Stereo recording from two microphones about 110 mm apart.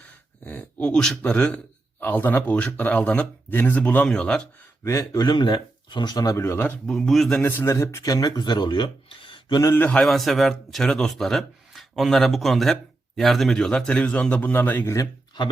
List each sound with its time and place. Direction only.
0.4 s a man's voice: 10° left (ahead or behind)
4.8 s speech: 30° left (ahead or behind)
6.8 s a man's voice: 5° left (ahead or behind)
7.4 s speech: 20° left (ahead or behind); by 9.6 s 50° left (ahead or behind)
9.6 s a man's voice: 25° left (ahead or behind)
9.8 s a man's voice: 10° left (ahead or behind)